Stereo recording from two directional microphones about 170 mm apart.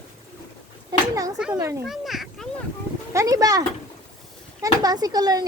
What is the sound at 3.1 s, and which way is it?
Speech, 20° right (ahead or behind).